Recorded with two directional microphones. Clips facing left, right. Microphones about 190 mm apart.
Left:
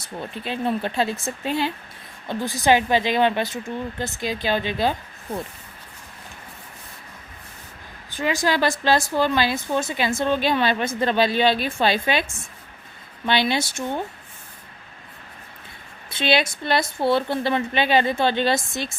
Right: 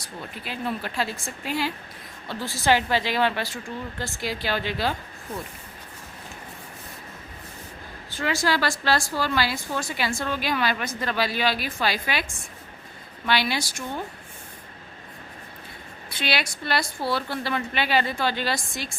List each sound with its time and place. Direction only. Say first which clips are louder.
0.0 s a woman's voice: left 5 dB; 25° left (ahead or behind)
8.1 s a woman's voice: left 3 dB; 15° left (ahead or behind)
16.0 s a woman's voice: left 7 dB; 25° left (ahead or behind)